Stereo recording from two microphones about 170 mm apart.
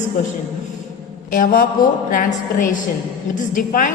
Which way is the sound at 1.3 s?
55° left (ahead or behind).